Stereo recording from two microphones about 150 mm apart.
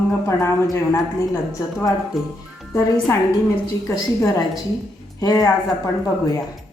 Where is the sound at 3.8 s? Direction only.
20° left (ahead or behind).